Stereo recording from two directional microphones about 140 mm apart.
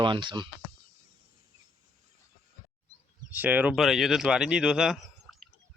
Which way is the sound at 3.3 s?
10° right (ahead or behind).